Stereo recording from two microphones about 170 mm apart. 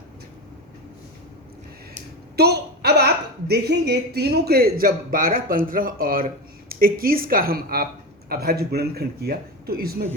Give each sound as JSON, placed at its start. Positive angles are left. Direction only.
{"t": 2.3, "sound": "a woman's voice", "side_deg": -70}